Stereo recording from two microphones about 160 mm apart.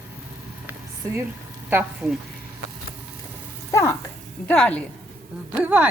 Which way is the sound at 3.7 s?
20° left (ahead or behind).